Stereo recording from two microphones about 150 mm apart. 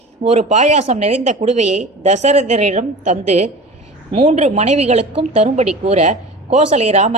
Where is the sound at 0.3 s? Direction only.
50° right (ahead or behind).